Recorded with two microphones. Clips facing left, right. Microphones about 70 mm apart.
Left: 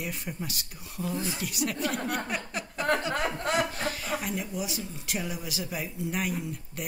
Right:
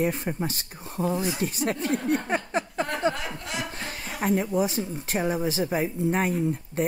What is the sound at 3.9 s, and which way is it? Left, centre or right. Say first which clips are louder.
Speech: right 6 dB; right.